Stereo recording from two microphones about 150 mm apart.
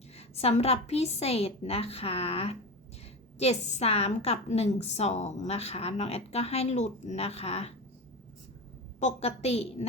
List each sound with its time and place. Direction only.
0.2 s a woman's voice: 45° left (ahead or behind)
9.0 s a woman's voice: 50° left (ahead or behind)